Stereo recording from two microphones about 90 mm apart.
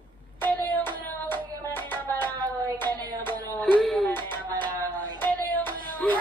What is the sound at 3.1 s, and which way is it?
Music, 55° right (ahead or behind).